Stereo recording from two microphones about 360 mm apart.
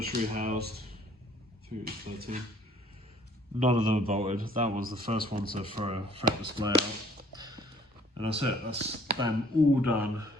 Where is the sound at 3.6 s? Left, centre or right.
Centre.